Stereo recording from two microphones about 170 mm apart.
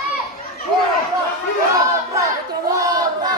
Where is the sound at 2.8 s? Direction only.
20° right (ahead or behind).